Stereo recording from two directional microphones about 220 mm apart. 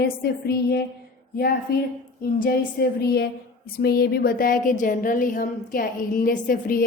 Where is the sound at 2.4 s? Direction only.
45° left (ahead or behind).